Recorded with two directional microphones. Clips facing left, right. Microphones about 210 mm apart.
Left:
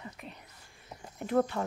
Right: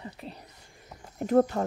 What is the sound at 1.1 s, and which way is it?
Speech, 40° right (ahead or behind).